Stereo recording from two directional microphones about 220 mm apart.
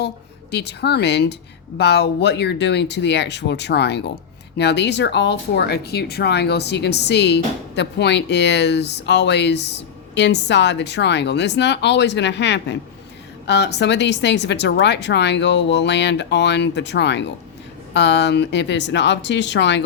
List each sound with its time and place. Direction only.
0.5 s speech: 50° left (ahead or behind)